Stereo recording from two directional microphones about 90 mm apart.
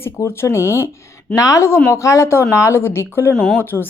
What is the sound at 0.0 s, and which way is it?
Speech, 30° left (ahead or behind).